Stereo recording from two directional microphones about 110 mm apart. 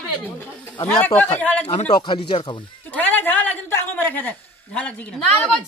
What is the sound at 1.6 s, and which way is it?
Speech, 65° left (ahead or behind).